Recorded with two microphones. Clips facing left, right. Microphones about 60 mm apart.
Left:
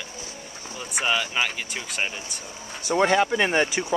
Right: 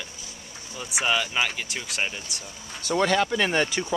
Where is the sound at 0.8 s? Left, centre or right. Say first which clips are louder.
Even; centre.